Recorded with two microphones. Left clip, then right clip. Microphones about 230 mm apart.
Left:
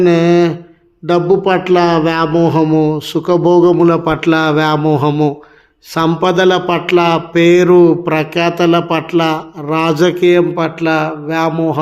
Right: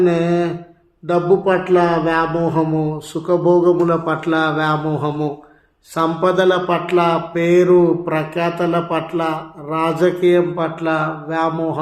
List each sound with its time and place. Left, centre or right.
0.0 s mantra: left